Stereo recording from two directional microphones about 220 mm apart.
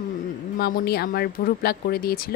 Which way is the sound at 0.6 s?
45° left (ahead or behind).